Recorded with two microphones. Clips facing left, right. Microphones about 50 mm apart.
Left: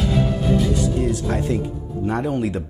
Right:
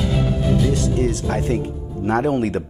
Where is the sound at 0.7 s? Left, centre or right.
Right.